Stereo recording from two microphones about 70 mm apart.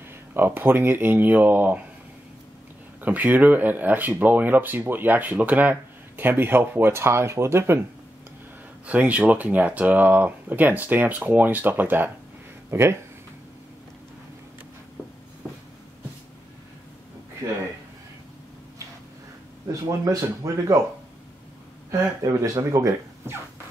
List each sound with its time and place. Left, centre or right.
0.3 s speech: right
3.0 s speech: right
8.8 s speech: centre; by 12.9 s right
17.4 s speech: right
19.7 s speech: right
22.2 s speech: right